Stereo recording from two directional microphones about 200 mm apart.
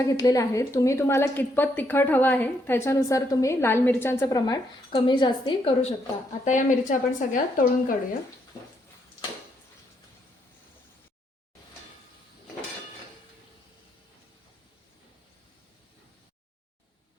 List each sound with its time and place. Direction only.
0.0 s a woman's voice: 15° left (ahead or behind)
6.4 s speech: 40° left (ahead or behind)